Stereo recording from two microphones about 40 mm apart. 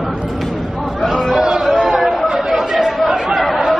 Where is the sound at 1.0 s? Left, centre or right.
Centre.